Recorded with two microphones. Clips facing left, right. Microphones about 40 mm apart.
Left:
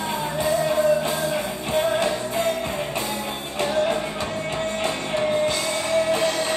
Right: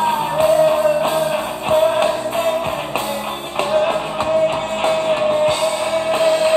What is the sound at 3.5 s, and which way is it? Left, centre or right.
Music, right.